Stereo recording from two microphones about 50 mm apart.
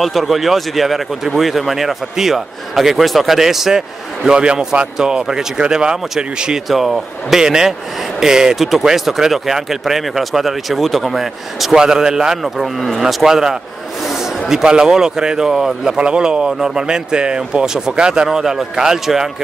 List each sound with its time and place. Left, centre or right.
0.0 s speech: centre
4.3 s speech: centre
6.7 s speech: centre
13.0 s speech: centre
14.0 s a sound: centre
14.5 s speech: centre